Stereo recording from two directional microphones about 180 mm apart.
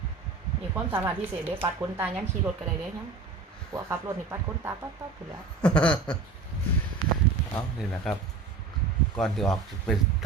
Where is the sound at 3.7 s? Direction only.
15° right (ahead or behind).